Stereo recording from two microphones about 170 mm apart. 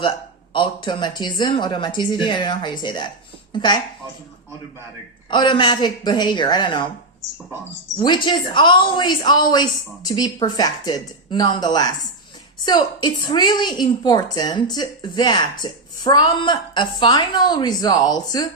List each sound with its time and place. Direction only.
0.5 s a woman's voice: 30° left (ahead or behind)
5.3 s a woman's voice: 25° left (ahead or behind)
7.9 s a woman's voice: 25° left (ahead or behind)